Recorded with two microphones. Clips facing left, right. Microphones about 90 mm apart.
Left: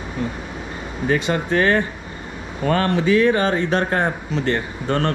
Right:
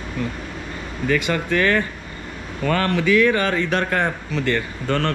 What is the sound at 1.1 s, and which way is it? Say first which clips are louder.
Speech: left 1 dB; 25° left (ahead or behind).